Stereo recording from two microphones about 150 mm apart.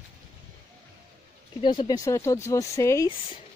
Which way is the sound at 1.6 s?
35° left (ahead or behind).